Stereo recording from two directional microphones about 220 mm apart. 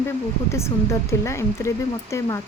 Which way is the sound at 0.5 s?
10° left (ahead or behind).